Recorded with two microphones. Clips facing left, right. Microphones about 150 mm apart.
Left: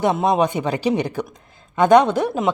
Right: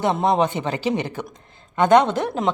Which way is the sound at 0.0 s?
15° left (ahead or behind).